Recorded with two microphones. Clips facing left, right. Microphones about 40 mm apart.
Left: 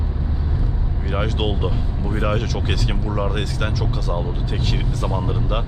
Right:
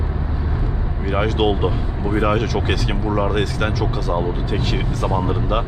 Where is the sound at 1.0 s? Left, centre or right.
Centre.